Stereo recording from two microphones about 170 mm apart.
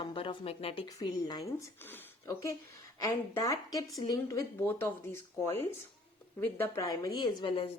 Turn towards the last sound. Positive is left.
turn(degrees=30)  # may be behind; listen again after turning